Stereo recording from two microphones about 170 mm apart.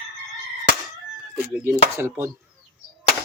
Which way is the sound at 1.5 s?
15° right (ahead or behind).